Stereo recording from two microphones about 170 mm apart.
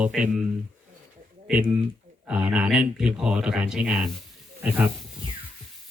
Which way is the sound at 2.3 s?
10° right (ahead or behind).